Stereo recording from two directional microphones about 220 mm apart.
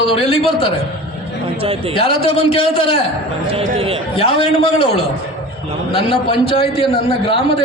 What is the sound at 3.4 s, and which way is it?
Speech, 25° right (ahead or behind).